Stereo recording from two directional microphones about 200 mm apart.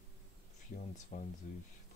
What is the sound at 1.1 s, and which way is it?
Speech, 40° left (ahead or behind).